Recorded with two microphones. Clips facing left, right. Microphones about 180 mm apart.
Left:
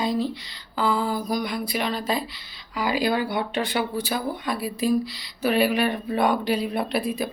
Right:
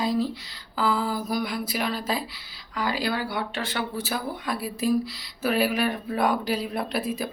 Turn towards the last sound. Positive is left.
turn(degrees=0)  # may be behind; listen again after turning